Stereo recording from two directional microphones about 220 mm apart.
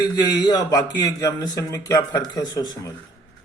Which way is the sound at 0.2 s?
20° left (ahead or behind).